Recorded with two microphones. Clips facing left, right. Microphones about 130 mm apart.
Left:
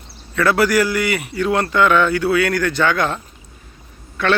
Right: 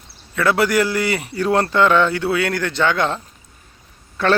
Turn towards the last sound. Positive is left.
turn(degrees=-35)  # may be behind; listen again after turning